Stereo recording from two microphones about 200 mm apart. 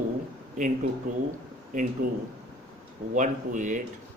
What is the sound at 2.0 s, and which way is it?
Speech, 45° right (ahead or behind).